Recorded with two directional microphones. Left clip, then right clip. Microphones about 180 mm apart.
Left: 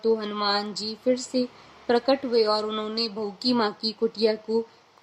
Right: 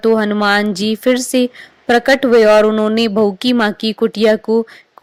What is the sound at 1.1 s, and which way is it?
Speech, 35° right (ahead or behind).